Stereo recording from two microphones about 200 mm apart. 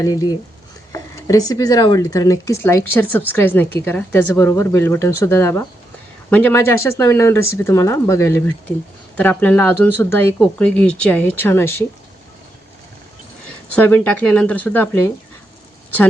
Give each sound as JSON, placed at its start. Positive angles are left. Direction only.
{"t": 0.0, "sound": "speech", "side_deg": 20}
{"t": 13.7, "sound": "speech", "side_deg": 10}